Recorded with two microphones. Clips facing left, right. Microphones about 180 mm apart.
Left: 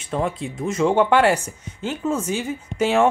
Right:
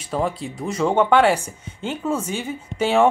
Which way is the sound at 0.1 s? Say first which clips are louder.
Even; centre (ahead or behind).